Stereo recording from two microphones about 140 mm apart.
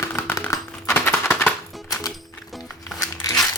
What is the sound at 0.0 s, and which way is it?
Typewriter, 15° left (ahead or behind).